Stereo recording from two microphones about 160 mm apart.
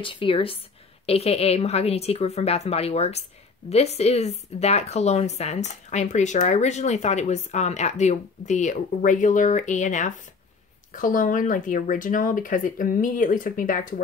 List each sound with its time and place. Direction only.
0.0 s a woman's voice: 30° left (ahead or behind); by 14.0 s 55° left (ahead or behind)